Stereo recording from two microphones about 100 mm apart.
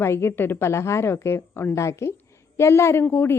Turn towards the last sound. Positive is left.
turn(degrees=25)  # may be behind; listen again after turning